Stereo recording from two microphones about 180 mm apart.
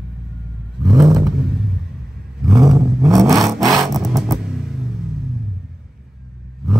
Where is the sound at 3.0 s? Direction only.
20° right (ahead or behind).